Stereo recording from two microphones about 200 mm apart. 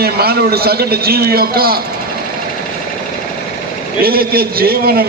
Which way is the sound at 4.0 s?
50° right (ahead or behind).